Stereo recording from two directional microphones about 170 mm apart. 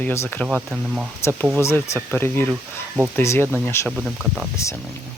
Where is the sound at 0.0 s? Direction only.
15° left (ahead or behind).